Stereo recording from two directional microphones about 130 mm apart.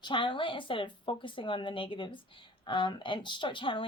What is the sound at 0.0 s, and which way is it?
Speech, 40° left (ahead or behind).